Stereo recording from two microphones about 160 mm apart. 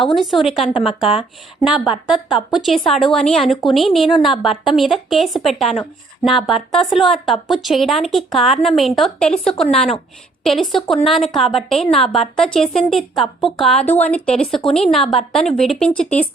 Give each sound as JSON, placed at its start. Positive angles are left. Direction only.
{"t": 0.0, "sound": "a woman's voice", "side_deg": 0}